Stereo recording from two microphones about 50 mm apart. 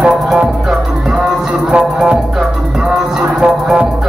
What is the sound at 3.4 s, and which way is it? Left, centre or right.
Music, right.